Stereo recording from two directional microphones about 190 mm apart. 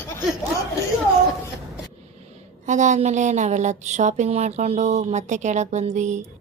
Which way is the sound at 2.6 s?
40° right (ahead or behind).